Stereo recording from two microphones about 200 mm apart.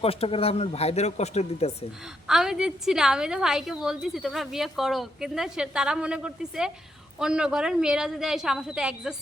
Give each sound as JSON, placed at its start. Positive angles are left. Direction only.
{"t": 0.0, "sound": "speech", "side_deg": 30}
{"t": 2.2, "sound": "a woman's voice", "side_deg": -5}